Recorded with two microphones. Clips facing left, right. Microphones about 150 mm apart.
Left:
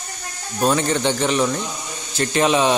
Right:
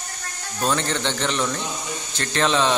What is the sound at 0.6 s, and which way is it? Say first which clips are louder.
Speech: left 5 dB; 15° left (ahead or behind).